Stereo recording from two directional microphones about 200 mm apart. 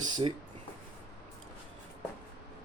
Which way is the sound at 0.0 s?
25° right (ahead or behind).